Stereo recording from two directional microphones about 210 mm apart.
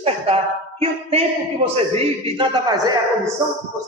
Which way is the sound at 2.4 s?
20° right (ahead or behind).